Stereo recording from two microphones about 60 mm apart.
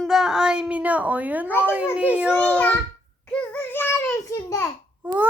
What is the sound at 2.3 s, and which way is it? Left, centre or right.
Speech, left.